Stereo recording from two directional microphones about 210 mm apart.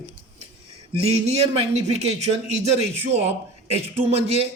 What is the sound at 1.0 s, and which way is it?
A man's voice, 30° right (ahead or behind).